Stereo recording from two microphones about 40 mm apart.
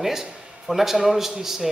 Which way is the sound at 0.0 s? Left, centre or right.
Centre.